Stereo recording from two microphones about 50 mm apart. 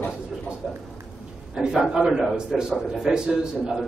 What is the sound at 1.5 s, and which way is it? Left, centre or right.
A man's voice, centre.